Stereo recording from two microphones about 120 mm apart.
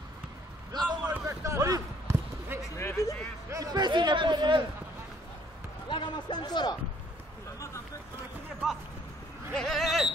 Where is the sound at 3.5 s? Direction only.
30° right (ahead or behind).